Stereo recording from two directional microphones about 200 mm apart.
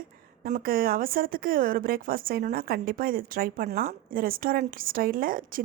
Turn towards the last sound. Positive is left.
turn(degrees=-45)  # may be behind; listen again after turning